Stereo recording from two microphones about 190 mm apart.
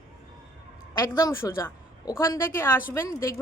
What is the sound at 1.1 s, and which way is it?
A woman's voice, 15° left (ahead or behind).